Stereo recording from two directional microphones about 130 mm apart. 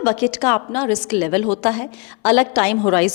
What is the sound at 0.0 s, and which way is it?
A woman's voice, 10° left (ahead or behind).